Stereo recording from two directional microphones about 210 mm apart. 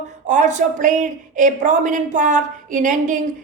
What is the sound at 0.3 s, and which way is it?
A woman's voice, 35° right (ahead or behind).